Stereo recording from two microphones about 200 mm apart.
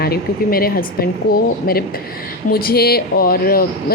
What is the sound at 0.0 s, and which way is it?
A woman's voice, 50° left (ahead or behind).